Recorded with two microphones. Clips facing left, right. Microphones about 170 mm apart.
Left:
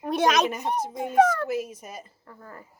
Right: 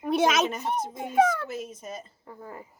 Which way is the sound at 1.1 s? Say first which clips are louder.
Left 2 dB; 10° right (ahead or behind).